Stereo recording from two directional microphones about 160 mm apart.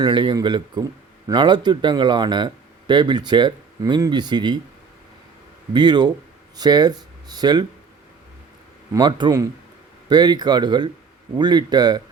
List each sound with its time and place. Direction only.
0.0 s speech: 30° right (ahead or behind)
5.7 s speech: 30° right (ahead or behind)
8.9 s speech: 25° right (ahead or behind)